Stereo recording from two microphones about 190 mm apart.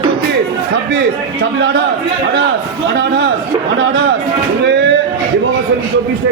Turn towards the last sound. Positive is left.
turn(degrees=-65)  # may be behind; listen again after turning